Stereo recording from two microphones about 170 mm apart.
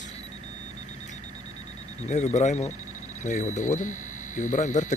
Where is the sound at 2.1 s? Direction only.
45° left (ahead or behind).